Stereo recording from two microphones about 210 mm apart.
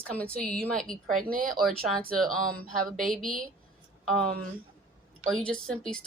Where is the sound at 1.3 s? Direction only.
40° right (ahead or behind).